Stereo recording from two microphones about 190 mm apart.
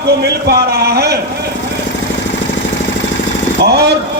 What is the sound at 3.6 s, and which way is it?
Speech, 60° right (ahead or behind).